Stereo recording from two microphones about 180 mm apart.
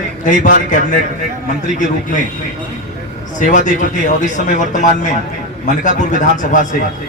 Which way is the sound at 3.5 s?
45° left (ahead or behind).